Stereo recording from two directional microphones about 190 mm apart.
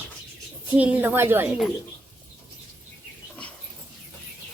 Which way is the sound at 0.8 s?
10° right (ahead or behind).